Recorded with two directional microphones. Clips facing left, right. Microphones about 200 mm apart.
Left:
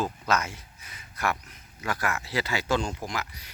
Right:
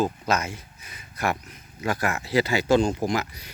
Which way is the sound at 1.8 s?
20° right (ahead or behind).